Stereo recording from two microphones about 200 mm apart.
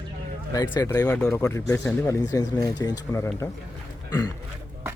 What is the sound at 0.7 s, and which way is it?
Speech, 15° left (ahead or behind).